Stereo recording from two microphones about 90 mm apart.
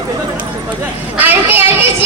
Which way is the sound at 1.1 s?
20° right (ahead or behind).